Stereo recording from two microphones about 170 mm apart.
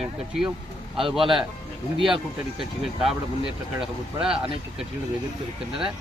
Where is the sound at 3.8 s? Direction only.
5° right (ahead or behind).